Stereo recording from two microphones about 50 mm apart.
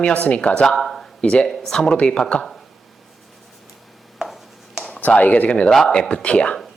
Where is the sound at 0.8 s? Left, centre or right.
Centre.